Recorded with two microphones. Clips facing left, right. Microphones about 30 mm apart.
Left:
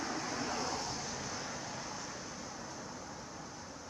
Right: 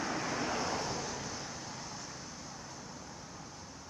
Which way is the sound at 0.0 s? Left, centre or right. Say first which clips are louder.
Right 3 dB; right.